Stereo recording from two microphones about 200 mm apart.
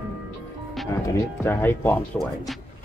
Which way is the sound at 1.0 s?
10° left (ahead or behind).